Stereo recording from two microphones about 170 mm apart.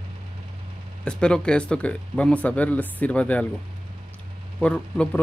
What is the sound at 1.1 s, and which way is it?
Speech, 5° left (ahead or behind).